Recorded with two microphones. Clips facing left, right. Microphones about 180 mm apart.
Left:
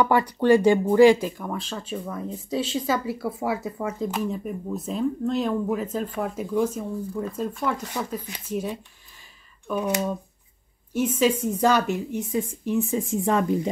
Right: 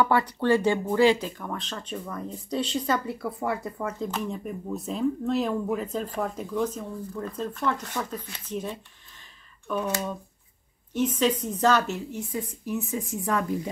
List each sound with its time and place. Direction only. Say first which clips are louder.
0.0 s a woman's voice: left 3 dB; 15° left (ahead or behind)